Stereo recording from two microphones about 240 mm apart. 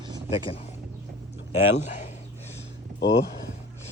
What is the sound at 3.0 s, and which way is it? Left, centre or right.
Speech, left.